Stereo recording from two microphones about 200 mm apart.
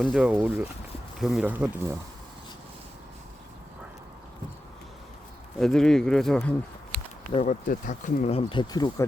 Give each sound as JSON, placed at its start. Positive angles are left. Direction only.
{"t": 0.0, "sound": "speech", "side_deg": -5}
{"t": 5.5, "sound": "speech", "side_deg": 0}
{"t": 7.3, "sound": "speech", "side_deg": 40}